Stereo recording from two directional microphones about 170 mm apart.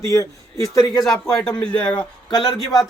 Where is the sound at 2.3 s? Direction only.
25° left (ahead or behind).